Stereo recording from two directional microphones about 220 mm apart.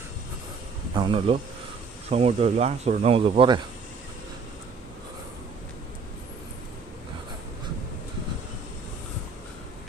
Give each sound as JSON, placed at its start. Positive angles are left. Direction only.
{"t": 0.9, "sound": "speech", "side_deg": -25}